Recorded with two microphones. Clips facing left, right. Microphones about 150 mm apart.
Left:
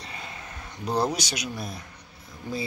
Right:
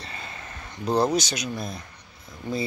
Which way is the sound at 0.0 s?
10° left (ahead or behind).